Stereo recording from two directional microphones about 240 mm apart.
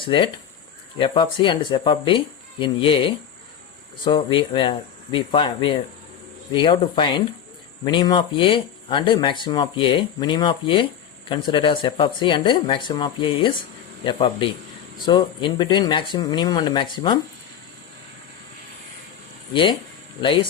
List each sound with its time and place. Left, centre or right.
0.0 s speech: left
20.2 s speech: left